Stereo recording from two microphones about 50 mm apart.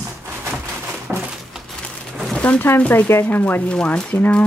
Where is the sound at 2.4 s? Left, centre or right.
Left.